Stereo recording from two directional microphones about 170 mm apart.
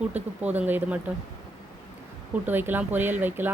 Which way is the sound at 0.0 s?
10° right (ahead or behind).